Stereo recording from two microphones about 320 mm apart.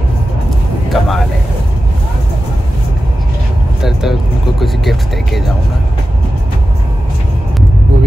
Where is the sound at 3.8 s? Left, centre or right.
Centre.